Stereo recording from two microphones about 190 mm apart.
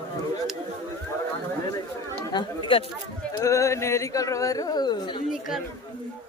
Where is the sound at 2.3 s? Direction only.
25° left (ahead or behind).